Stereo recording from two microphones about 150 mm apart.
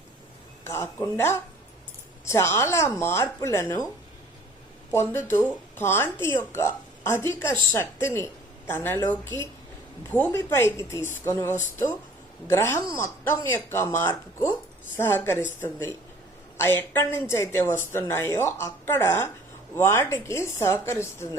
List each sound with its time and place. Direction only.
0.6 s a woman's voice: 15° left (ahead or behind)
4.9 s a woman's voice: 15° left (ahead or behind)